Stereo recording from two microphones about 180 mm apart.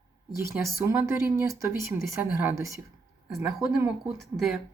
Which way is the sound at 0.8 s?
15° right (ahead or behind).